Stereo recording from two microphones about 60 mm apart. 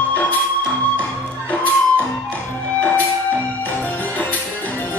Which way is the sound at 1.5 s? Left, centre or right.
Left.